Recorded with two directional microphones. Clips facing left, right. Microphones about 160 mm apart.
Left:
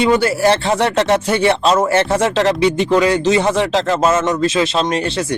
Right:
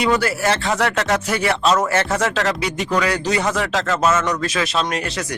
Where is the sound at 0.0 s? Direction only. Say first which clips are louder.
Left 5 dB; 25° left (ahead or behind).